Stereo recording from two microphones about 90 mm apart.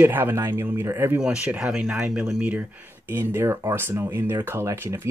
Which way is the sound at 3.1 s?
30° right (ahead or behind).